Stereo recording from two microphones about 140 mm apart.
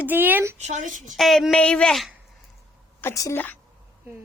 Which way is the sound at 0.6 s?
60° right (ahead or behind).